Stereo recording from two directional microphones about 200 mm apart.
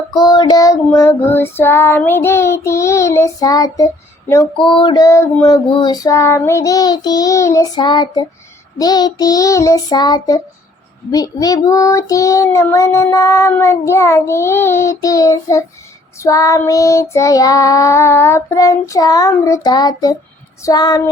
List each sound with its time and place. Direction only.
0.2 s child singing: 20° left (ahead or behind)